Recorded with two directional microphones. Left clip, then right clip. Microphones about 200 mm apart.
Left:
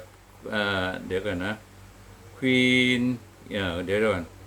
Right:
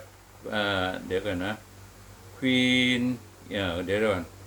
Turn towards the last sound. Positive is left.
turn(degrees=30)  # may be behind; listen again after turning